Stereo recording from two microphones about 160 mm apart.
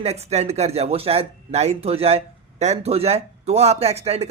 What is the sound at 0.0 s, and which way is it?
Speech, 40° right (ahead or behind).